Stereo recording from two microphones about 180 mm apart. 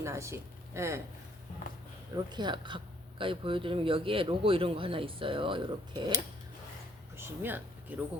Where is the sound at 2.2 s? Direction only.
25° right (ahead or behind).